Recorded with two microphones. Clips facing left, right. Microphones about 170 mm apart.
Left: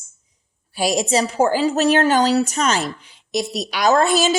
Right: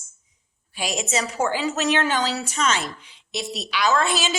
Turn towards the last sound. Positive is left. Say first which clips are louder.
# left 6 dB
turn(degrees=45)  # may be behind; listen again after turning